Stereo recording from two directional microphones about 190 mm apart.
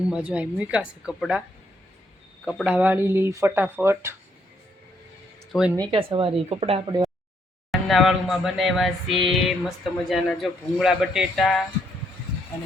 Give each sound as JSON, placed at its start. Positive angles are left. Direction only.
{"t": 0.0, "sound": "speech", "side_deg": -5}
{"t": 2.4, "sound": "speech", "side_deg": 0}
{"t": 5.5, "sound": "speech", "side_deg": -5}
{"t": 5.7, "sound": "speech", "side_deg": -25}
{"t": 7.7, "sound": "speech", "side_deg": 0}